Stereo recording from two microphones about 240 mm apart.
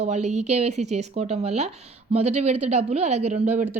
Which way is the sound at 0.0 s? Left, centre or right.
Right.